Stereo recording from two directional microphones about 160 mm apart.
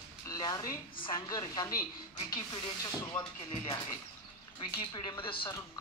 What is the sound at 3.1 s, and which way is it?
A woman's voice, 30° left (ahead or behind).